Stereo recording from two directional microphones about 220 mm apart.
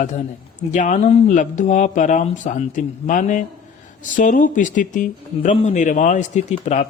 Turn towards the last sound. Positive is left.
turn(degrees=30)  # may be behind; listen again after turning